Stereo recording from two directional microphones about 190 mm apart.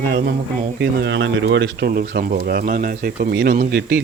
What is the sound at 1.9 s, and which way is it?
Speech, 50° right (ahead or behind).